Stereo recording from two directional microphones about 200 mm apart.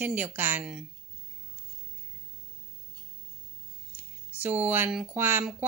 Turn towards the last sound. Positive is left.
turn(degrees=-5)  # may be behind; listen again after turning